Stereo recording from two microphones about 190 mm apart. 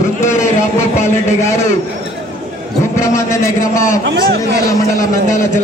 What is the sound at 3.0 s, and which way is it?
A man's voice, 15° left (ahead or behind).